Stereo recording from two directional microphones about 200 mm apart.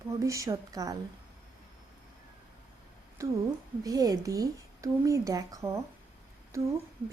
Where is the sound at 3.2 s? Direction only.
15° right (ahead or behind).